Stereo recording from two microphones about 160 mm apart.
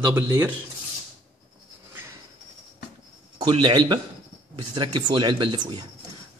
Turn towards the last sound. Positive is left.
turn(degrees=-30)  # may be behind; listen again after turning